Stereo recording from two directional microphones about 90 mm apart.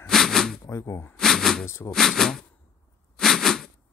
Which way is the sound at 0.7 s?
25° left (ahead or behind).